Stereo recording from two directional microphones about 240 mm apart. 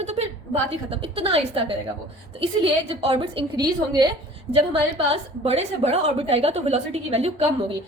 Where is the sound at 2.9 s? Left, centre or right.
Right.